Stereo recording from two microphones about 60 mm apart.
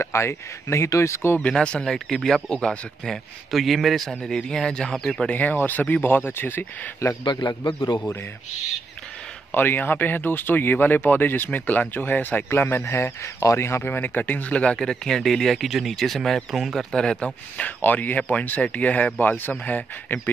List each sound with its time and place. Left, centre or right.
0.0 s speech: left
1.6 s speech: centre
3.5 s speech: centre
5.3 s speech: left
9.5 s speech: left
12.5 s speech: left; by 14.8 s centre
14.8 s speech: centre; by 20.2 s left